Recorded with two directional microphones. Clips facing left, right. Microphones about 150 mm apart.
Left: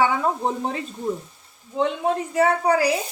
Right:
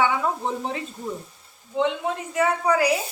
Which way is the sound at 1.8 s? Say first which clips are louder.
Left 2 dB; 35° left (ahead or behind).